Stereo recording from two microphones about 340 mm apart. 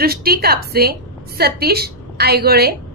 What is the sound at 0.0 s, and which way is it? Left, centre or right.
A woman's voice, right.